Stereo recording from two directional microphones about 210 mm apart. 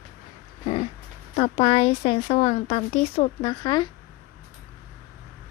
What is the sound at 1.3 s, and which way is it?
Speech, 30° left (ahead or behind).